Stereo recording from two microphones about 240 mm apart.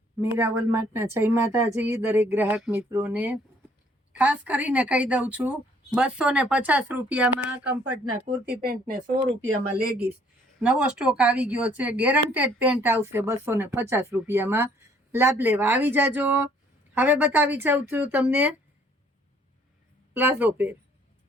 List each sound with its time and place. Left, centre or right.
0.2 s a woman's voice: centre
8.3 s speech: right
10.6 s speech: centre
20.1 s speech: centre